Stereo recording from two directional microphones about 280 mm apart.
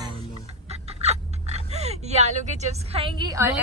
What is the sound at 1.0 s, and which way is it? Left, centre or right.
Speech, right.